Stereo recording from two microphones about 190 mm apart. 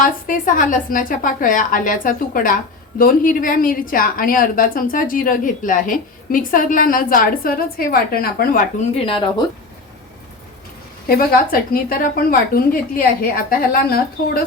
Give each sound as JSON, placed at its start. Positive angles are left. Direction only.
{"t": 0.0, "sound": "a woman's voice", "side_deg": 45}
{"t": 9.0, "sound": "speech", "side_deg": 25}
{"t": 11.1, "sound": "a woman's voice", "side_deg": 50}